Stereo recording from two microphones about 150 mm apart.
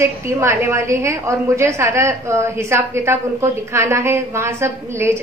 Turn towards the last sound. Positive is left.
turn(degrees=-15)  # may be behind; listen again after turning